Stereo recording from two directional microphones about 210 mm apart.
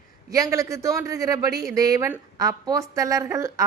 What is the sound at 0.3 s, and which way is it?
A woman's voice, 15° right (ahead or behind).